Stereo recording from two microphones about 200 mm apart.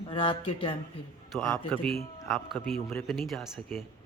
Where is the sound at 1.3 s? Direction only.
5° left (ahead or behind).